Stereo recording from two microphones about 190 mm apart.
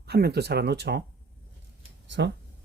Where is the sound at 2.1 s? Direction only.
70° right (ahead or behind).